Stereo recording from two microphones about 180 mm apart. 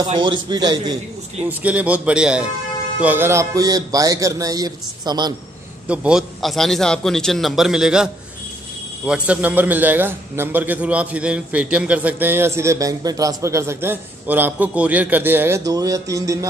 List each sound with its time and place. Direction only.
0.0 s a man's voice: 25° right (ahead or behind)
1.5 s a man's voice: 10° right (ahead or behind)
5.9 s a man's voice: 5° right (ahead or behind)